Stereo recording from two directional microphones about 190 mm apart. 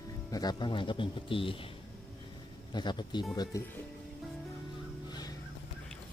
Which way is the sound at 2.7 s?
25° left (ahead or behind).